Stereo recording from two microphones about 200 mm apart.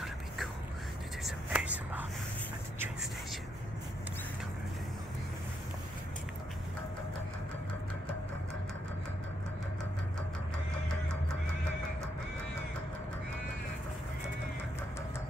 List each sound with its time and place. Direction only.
1.2 s whispering: 5° right (ahead or behind)